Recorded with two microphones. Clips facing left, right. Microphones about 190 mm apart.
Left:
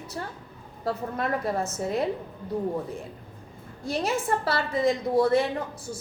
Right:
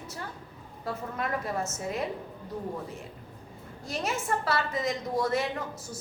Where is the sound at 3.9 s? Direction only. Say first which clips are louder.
Left 5 dB; 35° left (ahead or behind).